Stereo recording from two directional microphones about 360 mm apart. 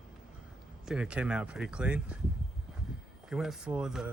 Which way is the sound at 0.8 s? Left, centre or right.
Centre.